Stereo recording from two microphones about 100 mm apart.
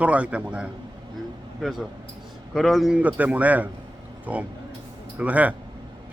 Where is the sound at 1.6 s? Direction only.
Centre (ahead or behind).